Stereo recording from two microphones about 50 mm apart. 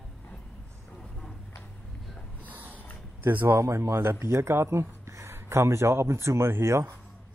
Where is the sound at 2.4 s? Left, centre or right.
Right.